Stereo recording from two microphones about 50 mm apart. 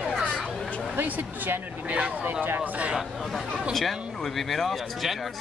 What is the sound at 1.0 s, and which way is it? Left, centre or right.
Speech, right.